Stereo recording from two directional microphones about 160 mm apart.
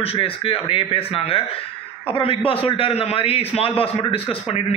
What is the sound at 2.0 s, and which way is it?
A man's voice, 35° left (ahead or behind).